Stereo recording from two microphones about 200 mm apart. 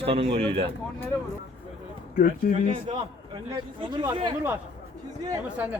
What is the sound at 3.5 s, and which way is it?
A man's voice, 20° right (ahead or behind).